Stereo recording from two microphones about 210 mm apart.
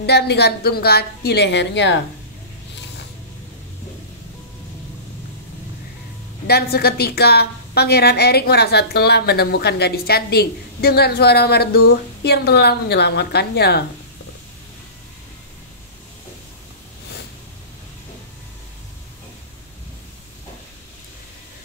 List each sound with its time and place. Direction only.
0.0 s a woman's voice: 50° left (ahead or behind)
6.4 s a woman's voice: 50° left (ahead or behind)